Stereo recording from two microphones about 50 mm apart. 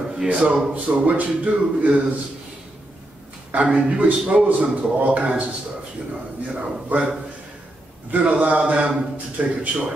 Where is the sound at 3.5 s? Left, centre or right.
Right.